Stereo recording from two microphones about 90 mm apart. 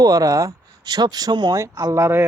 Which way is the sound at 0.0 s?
45° right (ahead or behind).